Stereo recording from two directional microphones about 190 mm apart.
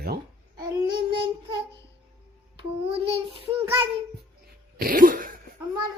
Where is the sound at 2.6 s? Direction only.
30° right (ahead or behind).